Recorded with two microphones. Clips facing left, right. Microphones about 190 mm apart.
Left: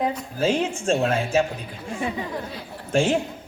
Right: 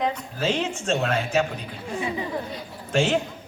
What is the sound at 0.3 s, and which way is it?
Speech, 30° left (ahead or behind).